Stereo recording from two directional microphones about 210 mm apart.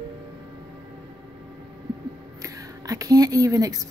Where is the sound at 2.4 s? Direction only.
15° right (ahead or behind).